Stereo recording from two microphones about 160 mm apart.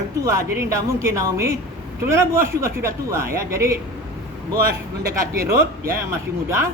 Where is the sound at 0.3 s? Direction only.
20° right (ahead or behind).